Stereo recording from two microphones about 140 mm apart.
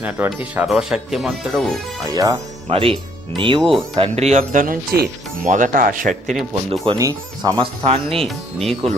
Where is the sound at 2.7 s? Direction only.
40° right (ahead or behind).